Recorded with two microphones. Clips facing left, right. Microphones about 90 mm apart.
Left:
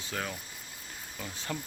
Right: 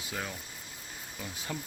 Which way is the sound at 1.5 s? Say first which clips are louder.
Left 2 dB; 5° right (ahead or behind).